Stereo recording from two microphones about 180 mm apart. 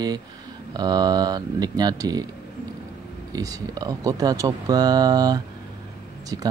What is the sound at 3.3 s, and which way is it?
Speech, 20° right (ahead or behind).